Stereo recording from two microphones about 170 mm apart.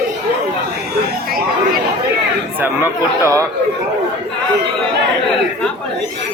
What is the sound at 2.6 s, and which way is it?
Speech, 15° right (ahead or behind).